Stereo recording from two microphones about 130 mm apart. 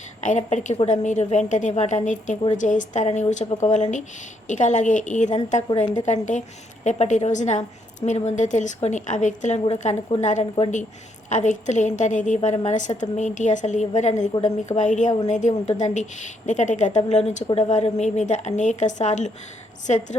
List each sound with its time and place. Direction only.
0.2 s a woman's voice: 70° left (ahead or behind)
6.8 s a woman's voice: 65° left (ahead or behind)